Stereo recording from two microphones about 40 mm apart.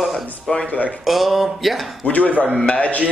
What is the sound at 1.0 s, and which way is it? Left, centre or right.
Speech, centre.